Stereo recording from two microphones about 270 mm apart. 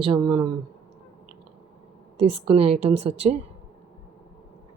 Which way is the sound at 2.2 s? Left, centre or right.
Right.